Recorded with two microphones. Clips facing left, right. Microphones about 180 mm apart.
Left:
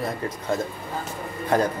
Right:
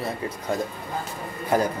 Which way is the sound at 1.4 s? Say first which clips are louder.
Left 1 dB; 10° right (ahead or behind).